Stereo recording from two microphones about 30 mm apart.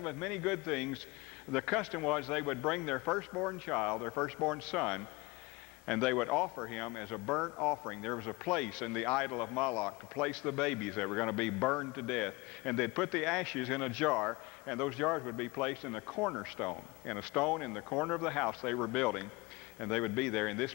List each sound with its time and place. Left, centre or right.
0.0 s a man's voice: centre
15.4 s a man's voice: left